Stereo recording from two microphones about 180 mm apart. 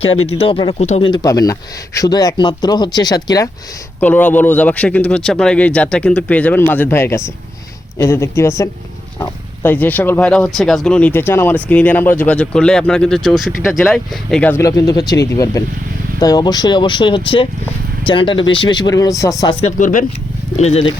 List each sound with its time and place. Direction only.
0.3 s speech: 30° left (ahead or behind)
4.0 s speech: 10° left (ahead or behind)
19.6 s speech: 45° left (ahead or behind)
20.6 s speech: 35° left (ahead or behind)